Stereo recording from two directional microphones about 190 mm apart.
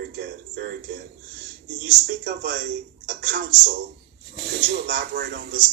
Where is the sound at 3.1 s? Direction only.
55° right (ahead or behind).